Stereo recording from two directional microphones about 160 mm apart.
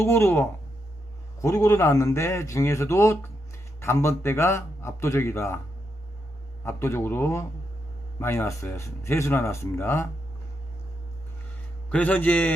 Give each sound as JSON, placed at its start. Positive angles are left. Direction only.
{"t": 0.0, "sound": "a man's voice", "side_deg": 15}
{"t": 6.7, "sound": "a man's voice", "side_deg": 15}
{"t": 11.9, "sound": "a man's voice", "side_deg": 10}